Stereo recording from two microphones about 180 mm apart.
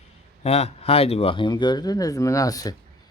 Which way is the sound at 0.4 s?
35° left (ahead or behind).